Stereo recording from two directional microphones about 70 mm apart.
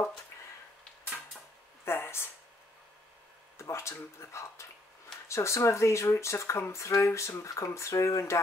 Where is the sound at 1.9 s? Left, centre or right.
Left.